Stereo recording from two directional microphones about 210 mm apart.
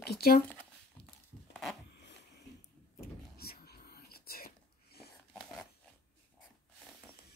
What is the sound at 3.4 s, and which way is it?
Whispering, 45° left (ahead or behind).